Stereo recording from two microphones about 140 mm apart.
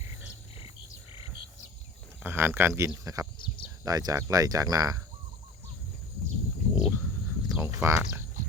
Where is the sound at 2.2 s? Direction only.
15° right (ahead or behind).